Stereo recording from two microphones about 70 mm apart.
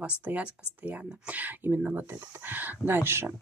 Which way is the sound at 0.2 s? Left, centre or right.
Right.